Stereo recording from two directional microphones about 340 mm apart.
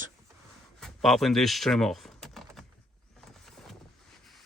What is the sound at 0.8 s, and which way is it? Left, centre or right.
Typing, centre.